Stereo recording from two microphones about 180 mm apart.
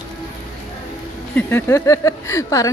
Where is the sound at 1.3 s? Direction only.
15° left (ahead or behind).